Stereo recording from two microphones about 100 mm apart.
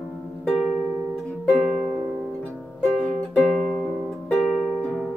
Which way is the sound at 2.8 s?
15° left (ahead or behind).